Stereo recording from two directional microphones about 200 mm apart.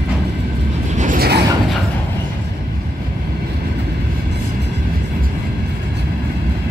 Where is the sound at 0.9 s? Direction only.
40° right (ahead or behind).